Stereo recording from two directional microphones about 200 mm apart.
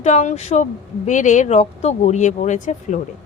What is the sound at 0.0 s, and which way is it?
A woman's voice, 35° left (ahead or behind).